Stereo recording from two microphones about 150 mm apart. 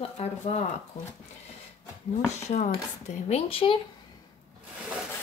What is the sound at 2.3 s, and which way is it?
Speech, 50° left (ahead or behind).